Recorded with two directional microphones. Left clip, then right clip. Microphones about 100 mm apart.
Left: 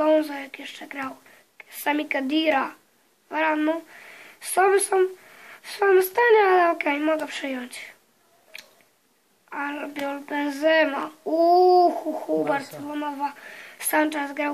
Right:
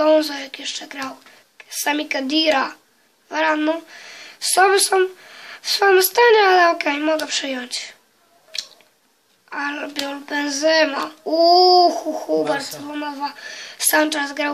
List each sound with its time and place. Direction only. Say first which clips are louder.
0.0 s a woman's voice: right 5 dB; 25° right (ahead or behind)
9.5 s a woman's voice: right 5 dB; 25° right (ahead or behind)